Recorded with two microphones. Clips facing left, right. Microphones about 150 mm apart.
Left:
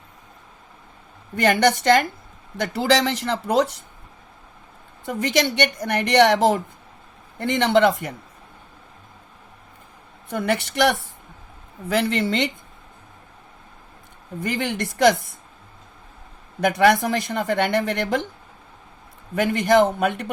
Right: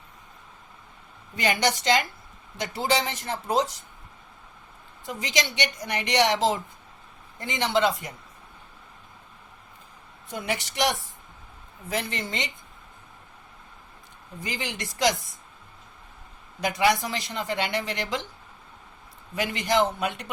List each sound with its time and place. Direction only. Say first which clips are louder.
1.4 s speech: left 7 dB; 55° left (ahead or behind)
2.6 s speech: left 6 dB; 70° left (ahead or behind)
5.0 s speech: left 8 dB; 60° left (ahead or behind)
10.2 s speech: left 7 dB; 60° left (ahead or behind)
11.9 s speech: left 9 dB; 70° left (ahead or behind)
14.4 s speech: left 8 dB; 55° left (ahead or behind)
16.6 s speech: left 6 dB; 55° left (ahead or behind)
19.3 s a man's voice: left 8 dB; 55° left (ahead or behind)